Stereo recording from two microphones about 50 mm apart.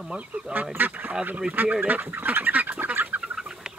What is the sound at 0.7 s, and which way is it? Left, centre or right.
Speech, right.